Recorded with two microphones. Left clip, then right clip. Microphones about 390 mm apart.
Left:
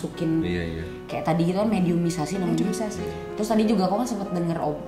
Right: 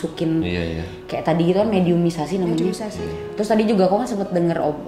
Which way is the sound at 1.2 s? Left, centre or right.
Left.